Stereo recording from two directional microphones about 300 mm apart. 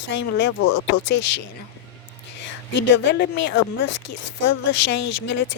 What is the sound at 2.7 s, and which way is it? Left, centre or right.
Speech, left.